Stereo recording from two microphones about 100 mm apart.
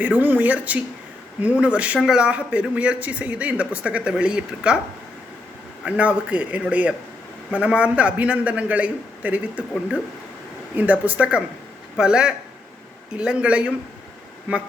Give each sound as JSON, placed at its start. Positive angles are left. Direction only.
{"t": 0.0, "sound": "speech", "side_deg": -15}
{"t": 5.8, "sound": "speech", "side_deg": -10}
{"t": 11.0, "sound": "speech", "side_deg": -10}